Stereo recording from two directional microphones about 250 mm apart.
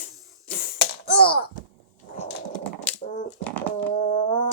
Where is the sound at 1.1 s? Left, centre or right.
Left.